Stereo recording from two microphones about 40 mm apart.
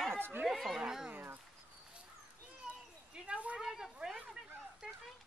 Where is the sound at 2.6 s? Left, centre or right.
Right.